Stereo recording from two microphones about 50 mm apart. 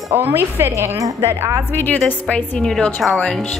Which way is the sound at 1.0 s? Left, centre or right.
Right.